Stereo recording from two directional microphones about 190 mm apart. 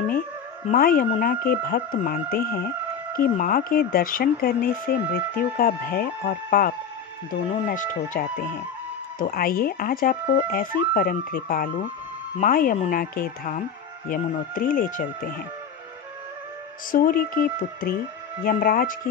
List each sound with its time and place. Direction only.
0.7 s speech: 50° left (ahead or behind)
16.9 s speech: 50° left (ahead or behind)